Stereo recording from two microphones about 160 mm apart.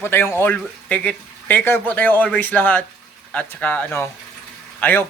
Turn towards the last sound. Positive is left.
turn(degrees=10)  # may be behind; listen again after turning